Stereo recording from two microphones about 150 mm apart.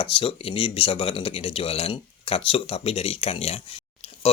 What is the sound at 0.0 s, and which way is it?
Speech, 35° left (ahead or behind).